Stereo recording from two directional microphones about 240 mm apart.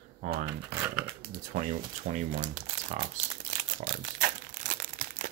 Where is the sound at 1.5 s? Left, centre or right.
Right.